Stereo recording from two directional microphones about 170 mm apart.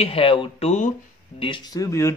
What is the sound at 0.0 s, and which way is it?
Speech, 35° left (ahead or behind).